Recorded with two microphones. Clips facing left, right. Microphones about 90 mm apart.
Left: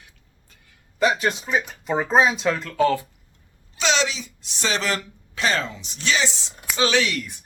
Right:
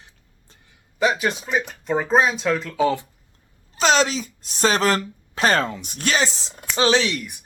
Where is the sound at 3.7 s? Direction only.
45° right (ahead or behind).